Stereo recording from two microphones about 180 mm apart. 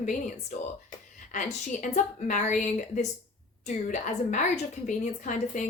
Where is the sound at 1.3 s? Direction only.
45° left (ahead or behind).